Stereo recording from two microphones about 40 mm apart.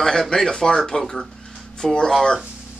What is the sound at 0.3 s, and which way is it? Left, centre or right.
Speech, centre.